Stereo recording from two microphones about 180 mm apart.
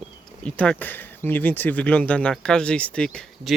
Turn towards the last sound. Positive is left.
turn(degrees=5)  # may be behind; listen again after turning